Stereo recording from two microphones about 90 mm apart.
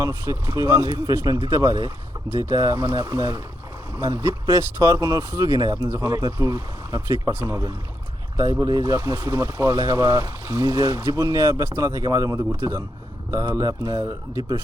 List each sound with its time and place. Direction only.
0.0 s speech: 35° right (ahead or behind)